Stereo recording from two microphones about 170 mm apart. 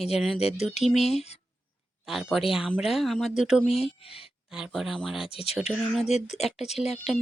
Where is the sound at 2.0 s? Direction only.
Centre (ahead or behind).